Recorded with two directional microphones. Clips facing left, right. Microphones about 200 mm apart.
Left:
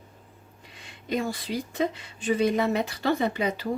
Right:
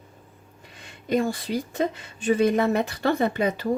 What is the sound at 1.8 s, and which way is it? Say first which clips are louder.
Speech: right 2 dB; 50° right (ahead or behind).